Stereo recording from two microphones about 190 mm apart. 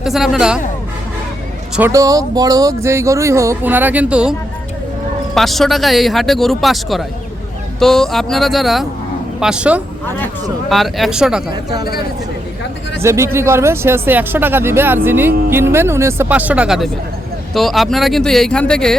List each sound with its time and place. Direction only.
0.0 s speech: centre (ahead or behind)
1.9 s speech: 20° right (ahead or behind)
11.5 s speech: 20° right (ahead or behind)
13.0 s speech: 15° right (ahead or behind); by 18.9 s 5° left (ahead or behind)